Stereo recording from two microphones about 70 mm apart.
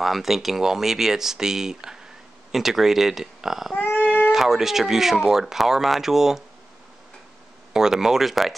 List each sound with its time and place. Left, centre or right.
0.0 s speech: centre
3.7 s a sound: left
4.3 s speech: centre
7.7 s speech: centre